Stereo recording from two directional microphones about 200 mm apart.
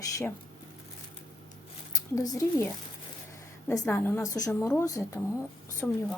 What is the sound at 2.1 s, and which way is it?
Speech, 15° left (ahead or behind).